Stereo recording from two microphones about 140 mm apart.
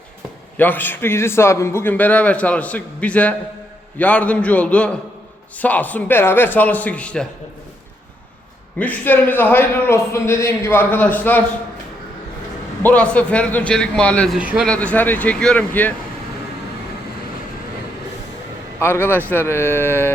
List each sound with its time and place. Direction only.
0.5 s a man's voice: 15° left (ahead or behind)
8.8 s a man's voice: 10° left (ahead or behind)
12.8 s a man's voice: 10° left (ahead or behind)
14.3 s a man's voice: 5° right (ahead or behind)
14.7 s a man's voice: 10° left (ahead or behind)
18.8 s a man's voice: 15° left (ahead or behind)